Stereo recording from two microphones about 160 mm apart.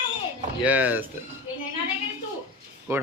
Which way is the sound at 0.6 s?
10° right (ahead or behind).